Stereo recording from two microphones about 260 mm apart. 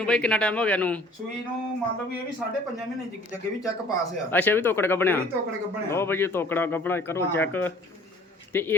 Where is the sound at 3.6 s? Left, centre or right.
Centre.